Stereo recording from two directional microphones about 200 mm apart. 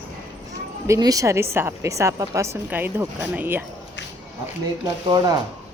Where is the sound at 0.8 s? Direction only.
15° right (ahead or behind).